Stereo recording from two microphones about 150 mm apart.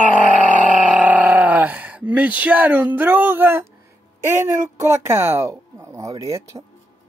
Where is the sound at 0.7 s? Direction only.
10° right (ahead or behind).